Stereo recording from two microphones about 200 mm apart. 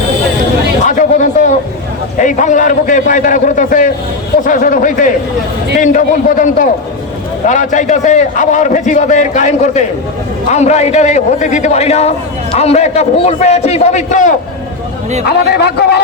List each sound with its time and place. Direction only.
0.9 s a sound: 40° left (ahead or behind)
2.1 s a man's voice: 40° left (ahead or behind)
15.3 s a man's voice: 55° left (ahead or behind)